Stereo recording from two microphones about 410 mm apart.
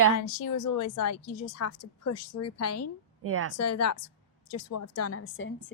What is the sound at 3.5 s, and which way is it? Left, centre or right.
Speech, left.